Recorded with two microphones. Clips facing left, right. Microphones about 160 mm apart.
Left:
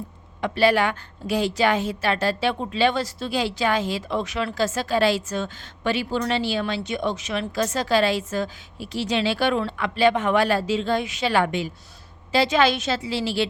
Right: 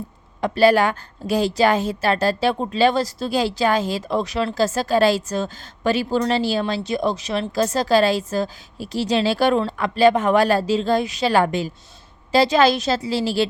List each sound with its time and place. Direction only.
0.4 s a woman's voice: 40° right (ahead or behind)